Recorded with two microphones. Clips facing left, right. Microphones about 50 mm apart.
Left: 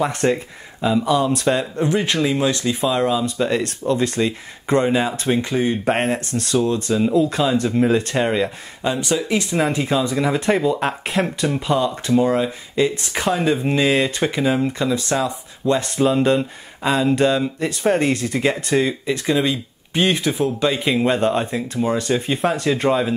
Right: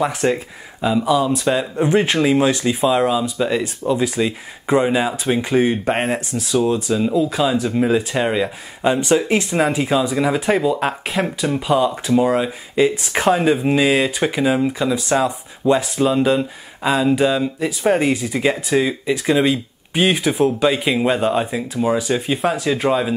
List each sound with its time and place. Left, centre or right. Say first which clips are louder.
0.0 s speech: right 1 dB; centre
1.8 s speech: right 3 dB; right
5.5 s speech: right 4 dB; right
6.5 s speech: right 1 dB; centre
8.8 s speech: right 5 dB; right
9.6 s speech: right 1 dB; centre
15.8 s speech: even; centre